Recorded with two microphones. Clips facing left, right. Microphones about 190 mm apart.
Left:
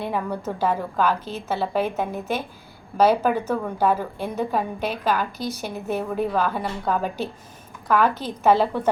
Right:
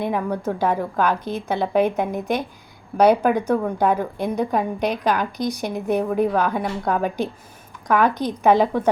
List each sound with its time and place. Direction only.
0.0 s a woman's voice: 15° right (ahead or behind)